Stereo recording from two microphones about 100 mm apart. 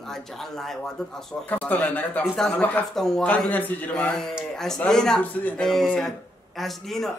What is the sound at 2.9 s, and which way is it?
A man's voice, 5° left (ahead or behind).